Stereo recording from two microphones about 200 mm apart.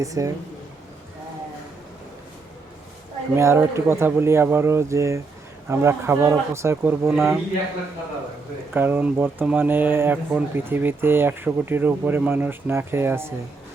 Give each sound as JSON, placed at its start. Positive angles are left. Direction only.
{"t": 0.0, "sound": "speech", "side_deg": -15}
{"t": 3.3, "sound": "speech", "side_deg": -10}
{"t": 8.7, "sound": "speech", "side_deg": -10}